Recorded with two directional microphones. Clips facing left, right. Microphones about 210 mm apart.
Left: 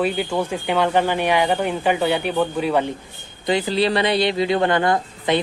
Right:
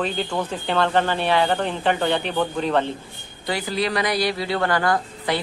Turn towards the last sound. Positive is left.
turn(degrees=20)  # may be behind; listen again after turning